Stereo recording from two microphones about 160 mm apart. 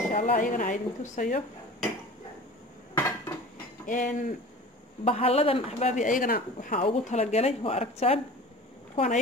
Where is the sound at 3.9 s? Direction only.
55° left (ahead or behind).